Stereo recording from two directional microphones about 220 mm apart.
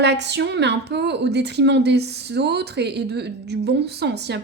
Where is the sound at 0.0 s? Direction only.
50° right (ahead or behind).